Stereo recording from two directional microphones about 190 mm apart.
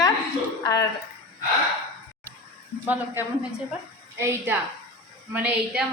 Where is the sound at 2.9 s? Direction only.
10° right (ahead or behind).